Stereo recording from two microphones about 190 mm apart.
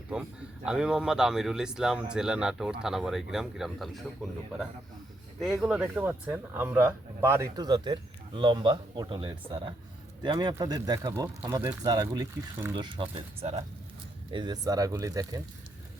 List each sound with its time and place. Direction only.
0.1 s a man's voice: 5° right (ahead or behind)
5.6 s a man's voice: 5° right (ahead or behind)
12.7 s speech: 25° right (ahead or behind)